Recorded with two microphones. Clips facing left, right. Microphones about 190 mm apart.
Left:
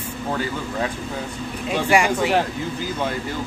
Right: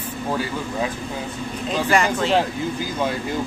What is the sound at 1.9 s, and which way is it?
Speech, 10° left (ahead or behind).